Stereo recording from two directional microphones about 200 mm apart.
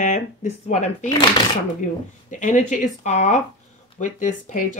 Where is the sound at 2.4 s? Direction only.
40° left (ahead or behind).